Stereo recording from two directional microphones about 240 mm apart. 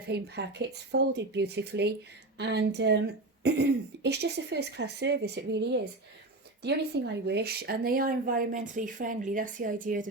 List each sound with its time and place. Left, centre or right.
0.1 s speech: right
6.9 s speech: right